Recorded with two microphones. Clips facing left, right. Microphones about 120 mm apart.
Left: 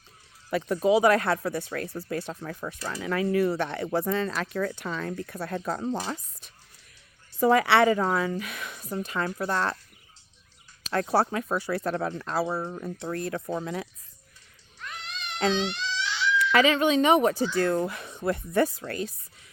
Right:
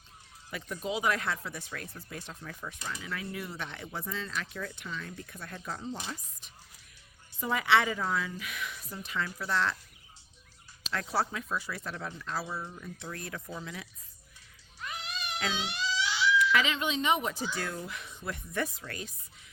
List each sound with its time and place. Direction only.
0.7 s speech: 70° left (ahead or behind); by 3.2 s 55° left (ahead or behind)
3.2 s speech: 80° left
4.3 s speech: 45° left (ahead or behind)
4.6 s speech: 65° left (ahead or behind); by 6.0 s 50° left (ahead or behind)
7.3 s speech: 75° left (ahead or behind); by 8.9 s 40° left (ahead or behind)
8.9 s speech: 50° left (ahead or behind)
10.9 s speech: 55° left (ahead or behind)
11.9 s speech: 55° left (ahead or behind)
14.8 s cat: 5° right (ahead or behind)
15.5 s a sound: 10° right (ahead or behind)
16.5 s speech: 60° left (ahead or behind)
18.9 s speech: 40° left (ahead or behind)